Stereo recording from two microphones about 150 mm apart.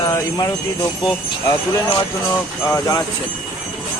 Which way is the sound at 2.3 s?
20° left (ahead or behind).